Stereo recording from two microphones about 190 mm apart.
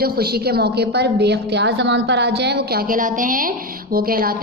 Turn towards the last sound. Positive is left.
turn(degrees=-50)  # may be behind; listen again after turning